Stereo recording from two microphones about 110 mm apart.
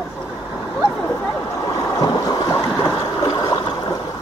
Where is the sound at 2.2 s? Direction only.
35° left (ahead or behind).